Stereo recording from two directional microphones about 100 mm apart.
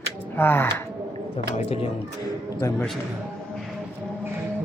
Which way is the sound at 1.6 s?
80° left.